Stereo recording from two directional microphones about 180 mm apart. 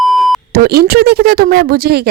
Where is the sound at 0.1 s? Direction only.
Centre (ahead or behind).